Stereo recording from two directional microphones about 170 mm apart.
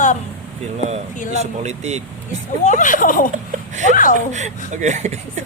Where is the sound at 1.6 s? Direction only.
40° right (ahead or behind).